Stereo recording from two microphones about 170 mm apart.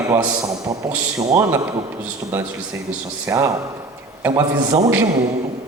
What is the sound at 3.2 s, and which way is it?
A woman's voice, 20° right (ahead or behind).